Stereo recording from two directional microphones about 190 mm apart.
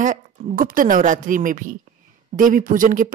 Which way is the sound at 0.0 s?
40° right (ahead or behind).